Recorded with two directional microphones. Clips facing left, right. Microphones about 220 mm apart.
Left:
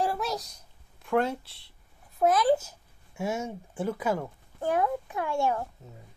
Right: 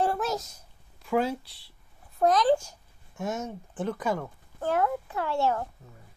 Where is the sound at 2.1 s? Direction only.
5° left (ahead or behind).